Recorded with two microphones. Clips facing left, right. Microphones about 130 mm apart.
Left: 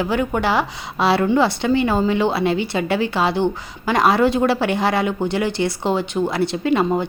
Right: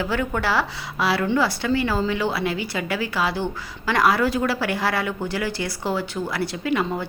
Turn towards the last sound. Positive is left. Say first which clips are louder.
# left 6 dB
turn(degrees=25)  # may be behind; listen again after turning